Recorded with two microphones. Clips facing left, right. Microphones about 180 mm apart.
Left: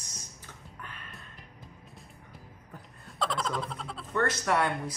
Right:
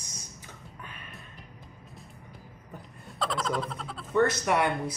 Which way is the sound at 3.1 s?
Centre (ahead or behind).